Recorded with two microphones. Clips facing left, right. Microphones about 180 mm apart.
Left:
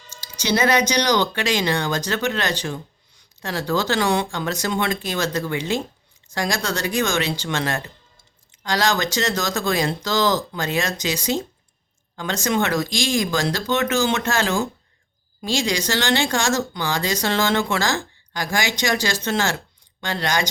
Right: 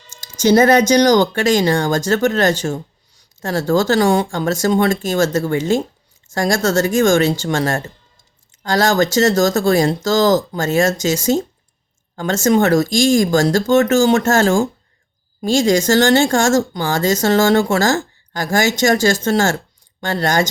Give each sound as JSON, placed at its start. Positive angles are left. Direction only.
{"t": 0.3, "sound": "speech", "side_deg": -45}